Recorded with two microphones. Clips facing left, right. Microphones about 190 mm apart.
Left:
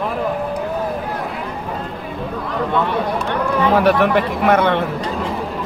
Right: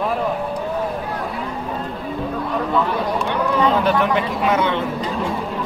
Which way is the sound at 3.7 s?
75° left (ahead or behind).